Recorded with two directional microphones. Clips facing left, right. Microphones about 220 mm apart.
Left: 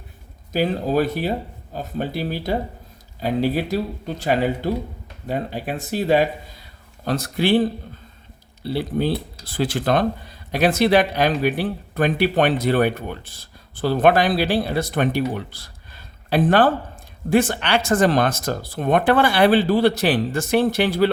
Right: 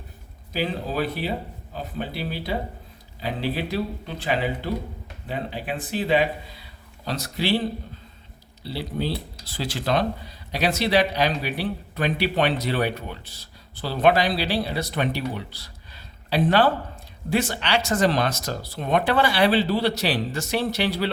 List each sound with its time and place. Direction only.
0.5 s speech: 45° left (ahead or behind)